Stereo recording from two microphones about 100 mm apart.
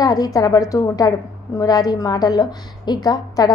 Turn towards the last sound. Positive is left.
turn(degrees=40)  # may be behind; listen again after turning